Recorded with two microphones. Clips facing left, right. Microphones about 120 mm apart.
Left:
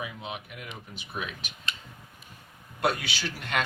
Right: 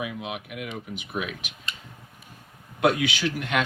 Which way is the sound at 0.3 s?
75° right (ahead or behind).